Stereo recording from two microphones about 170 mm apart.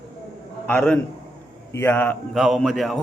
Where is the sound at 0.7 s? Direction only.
10° left (ahead or behind).